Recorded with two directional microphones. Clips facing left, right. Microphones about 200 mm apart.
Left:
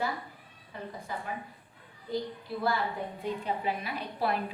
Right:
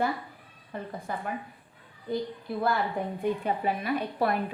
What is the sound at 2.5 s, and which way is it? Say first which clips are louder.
A woman's voice: right 3 dB; 55° right (ahead or behind).